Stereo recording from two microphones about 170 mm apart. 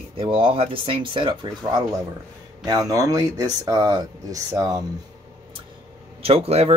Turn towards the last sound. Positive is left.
turn(degrees=-35)  # may be behind; listen again after turning